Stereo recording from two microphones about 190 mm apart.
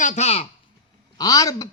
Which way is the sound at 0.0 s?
40° left (ahead or behind).